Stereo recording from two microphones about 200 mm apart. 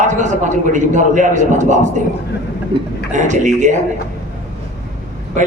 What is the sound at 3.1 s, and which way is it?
Speech, 40° right (ahead or behind).